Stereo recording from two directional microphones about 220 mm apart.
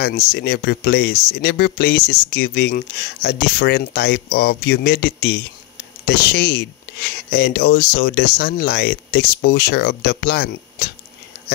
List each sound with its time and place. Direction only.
0.0 s speech: 45° left (ahead or behind)